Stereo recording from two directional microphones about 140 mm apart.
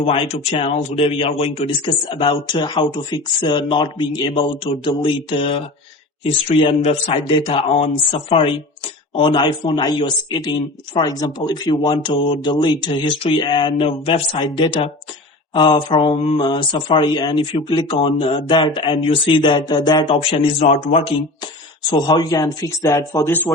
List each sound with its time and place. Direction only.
0.0 s speech: 45° left (ahead or behind)
1.2 s speech: 40° left (ahead or behind)
20.3 s speech: 55° left (ahead or behind)
21.0 s speech: 30° left (ahead or behind); by 23.5 s 15° left (ahead or behind)